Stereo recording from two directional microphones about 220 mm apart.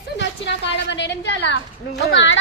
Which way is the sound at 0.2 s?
50° left (ahead or behind).